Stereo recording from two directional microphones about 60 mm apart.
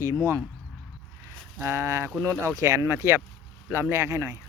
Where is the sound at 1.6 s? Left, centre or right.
Right.